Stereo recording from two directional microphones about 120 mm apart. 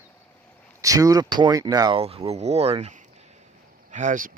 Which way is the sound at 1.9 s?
55° right (ahead or behind).